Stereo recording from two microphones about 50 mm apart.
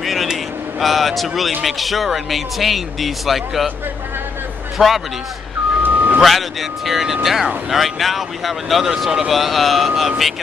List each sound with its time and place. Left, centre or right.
0.0 s vehicle: centre
1.6 s speech: centre
4.7 s speech: centre
5.8 s vehicle: right
6.9 s speech: centre